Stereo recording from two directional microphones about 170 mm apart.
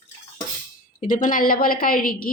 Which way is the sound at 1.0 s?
50° left (ahead or behind).